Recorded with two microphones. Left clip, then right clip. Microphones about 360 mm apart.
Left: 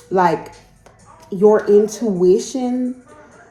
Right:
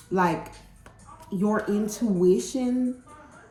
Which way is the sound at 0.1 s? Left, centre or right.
Centre.